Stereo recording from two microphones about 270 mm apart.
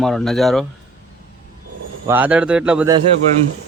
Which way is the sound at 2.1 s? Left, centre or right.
Centre.